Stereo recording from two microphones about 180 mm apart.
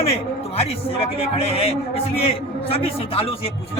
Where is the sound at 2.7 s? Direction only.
30° left (ahead or behind).